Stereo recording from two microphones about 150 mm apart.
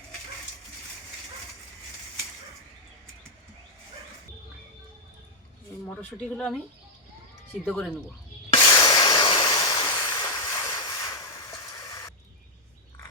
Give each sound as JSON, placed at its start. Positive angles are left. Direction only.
{"t": 5.9, "sound": "speech", "side_deg": 5}
{"t": 7.6, "sound": "speech", "side_deg": 5}
{"t": 8.5, "sound": "a sound", "side_deg": 30}